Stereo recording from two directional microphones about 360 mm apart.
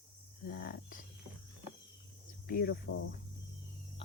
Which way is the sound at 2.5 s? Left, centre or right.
Left.